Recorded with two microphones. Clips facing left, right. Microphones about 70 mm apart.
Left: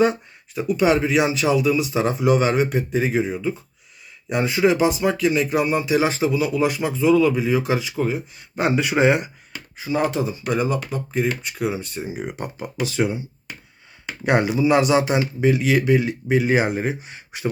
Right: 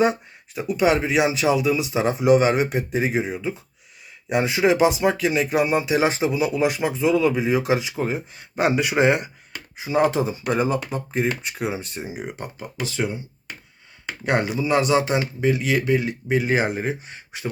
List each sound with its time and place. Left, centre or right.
0.0 s speech: centre
8.5 s speech: centre
9.7 s speech: centre
11.9 s speech: centre
12.4 s speech: centre
14.3 s speech: centre